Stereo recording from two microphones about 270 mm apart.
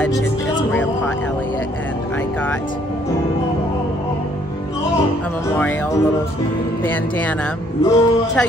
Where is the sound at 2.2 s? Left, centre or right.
Centre.